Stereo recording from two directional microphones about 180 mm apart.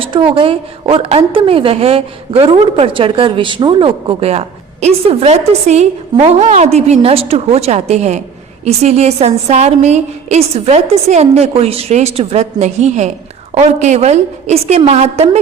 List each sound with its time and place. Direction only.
0.0 s a woman's voice: 30° right (ahead or behind)